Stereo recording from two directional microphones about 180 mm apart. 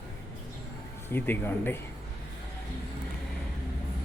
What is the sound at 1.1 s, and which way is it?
Speech, 10° left (ahead or behind).